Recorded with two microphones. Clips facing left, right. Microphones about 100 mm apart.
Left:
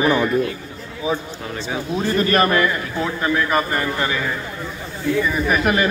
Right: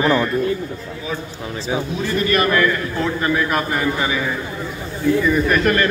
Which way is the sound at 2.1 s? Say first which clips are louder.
Left 1 dB; 40° left (ahead or behind).